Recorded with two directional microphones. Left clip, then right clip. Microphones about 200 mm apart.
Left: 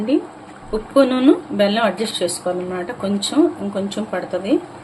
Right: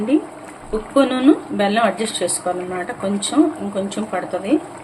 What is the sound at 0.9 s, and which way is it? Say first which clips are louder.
Speech: left 1 dB; 10° left (ahead or behind).